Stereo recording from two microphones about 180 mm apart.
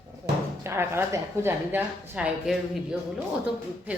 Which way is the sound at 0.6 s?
15° right (ahead or behind).